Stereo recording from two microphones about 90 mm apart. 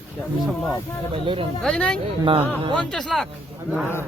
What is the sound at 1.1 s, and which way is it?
Speech, 75° right (ahead or behind).